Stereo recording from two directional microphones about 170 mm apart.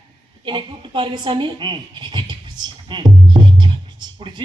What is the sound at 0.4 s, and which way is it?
A man's voice, 30° right (ahead or behind).